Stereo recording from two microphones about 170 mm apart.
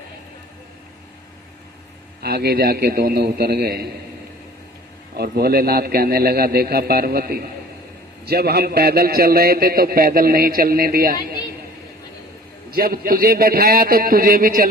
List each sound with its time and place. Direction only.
2.2 s a man's voice: 65° right (ahead or behind)
5.1 s a man's voice: 65° right (ahead or behind)
12.7 s a man's voice: 60° right (ahead or behind)